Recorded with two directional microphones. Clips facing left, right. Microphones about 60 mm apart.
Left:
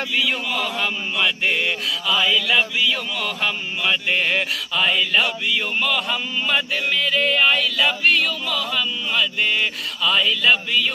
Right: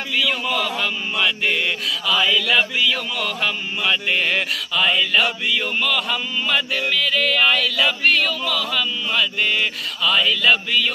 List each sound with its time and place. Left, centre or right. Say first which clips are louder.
0.5 s mantra: right 1 dB; centre